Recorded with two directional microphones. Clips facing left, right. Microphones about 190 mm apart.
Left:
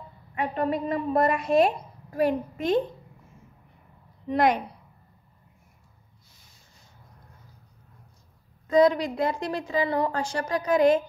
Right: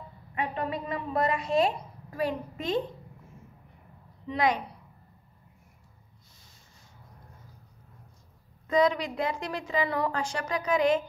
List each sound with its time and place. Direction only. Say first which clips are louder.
0.7 s a woman's voice: left 7 dB; 45° left (ahead or behind)
4.3 s a woman's voice: left 4 dB; 50° left (ahead or behind)
8.7 s a woman's voice: left 5 dB; 35° left (ahead or behind)